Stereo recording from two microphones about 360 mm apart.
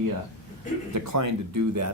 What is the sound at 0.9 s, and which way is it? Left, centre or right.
Speech, right.